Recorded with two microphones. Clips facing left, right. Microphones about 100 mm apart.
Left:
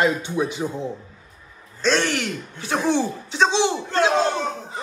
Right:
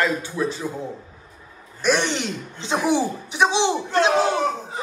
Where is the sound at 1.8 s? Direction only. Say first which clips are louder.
Even; 15° right (ahead or behind).